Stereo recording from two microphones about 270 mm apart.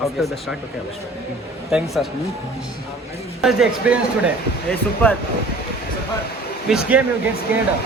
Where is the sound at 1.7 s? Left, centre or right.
Centre.